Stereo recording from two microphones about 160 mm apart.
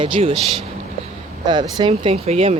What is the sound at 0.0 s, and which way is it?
Speech, 35° right (ahead or behind).